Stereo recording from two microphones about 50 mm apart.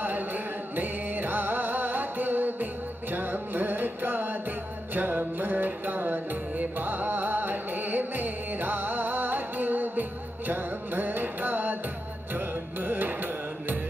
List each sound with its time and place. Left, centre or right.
0.0 s music: right